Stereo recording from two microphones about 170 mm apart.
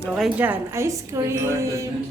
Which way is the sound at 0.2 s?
10° right (ahead or behind).